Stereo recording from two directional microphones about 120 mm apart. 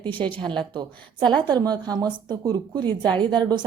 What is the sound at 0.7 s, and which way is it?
Speech, 40° right (ahead or behind).